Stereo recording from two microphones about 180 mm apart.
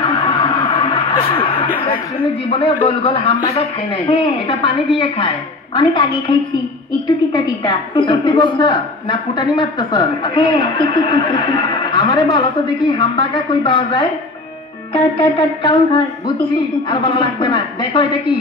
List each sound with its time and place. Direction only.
0.1 s music: 30° left (ahead or behind)
2.5 s a man's voice: 30° left (ahead or behind)
7.3 s a woman's voice: 25° left (ahead or behind)
15.1 s a woman's voice: 25° left (ahead or behind)